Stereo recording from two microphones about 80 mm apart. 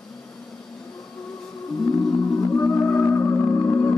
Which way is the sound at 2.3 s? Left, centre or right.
Left.